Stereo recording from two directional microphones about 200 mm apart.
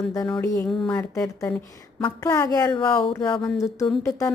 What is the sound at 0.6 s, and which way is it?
A woman's voice, 5° left (ahead or behind).